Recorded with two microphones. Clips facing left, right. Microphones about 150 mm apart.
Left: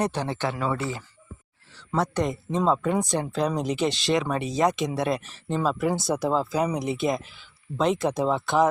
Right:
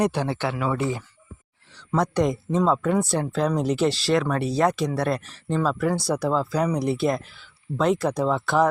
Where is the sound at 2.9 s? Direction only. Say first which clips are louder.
Right 2 dB; 15° left (ahead or behind).